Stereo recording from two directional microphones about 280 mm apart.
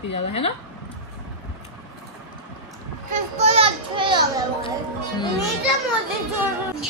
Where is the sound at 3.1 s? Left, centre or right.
Right.